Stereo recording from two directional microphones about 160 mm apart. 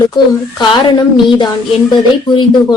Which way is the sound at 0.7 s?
30° left (ahead or behind).